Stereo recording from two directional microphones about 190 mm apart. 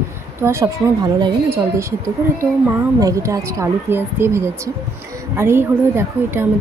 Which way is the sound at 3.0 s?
20° right (ahead or behind).